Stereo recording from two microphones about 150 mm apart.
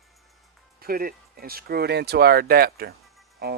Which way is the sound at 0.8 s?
80° right.